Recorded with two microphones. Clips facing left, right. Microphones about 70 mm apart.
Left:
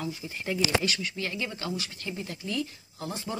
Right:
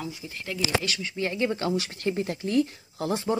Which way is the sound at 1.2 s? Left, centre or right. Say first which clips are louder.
Right 12 dB; right.